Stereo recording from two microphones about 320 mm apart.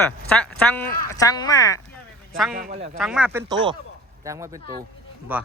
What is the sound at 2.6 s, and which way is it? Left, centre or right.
Speech, right.